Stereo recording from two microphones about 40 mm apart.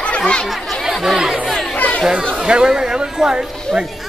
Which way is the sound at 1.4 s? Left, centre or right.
Centre.